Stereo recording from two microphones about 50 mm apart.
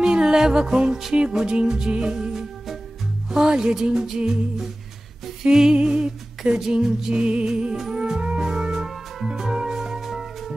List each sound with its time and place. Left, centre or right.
0.0 s music: centre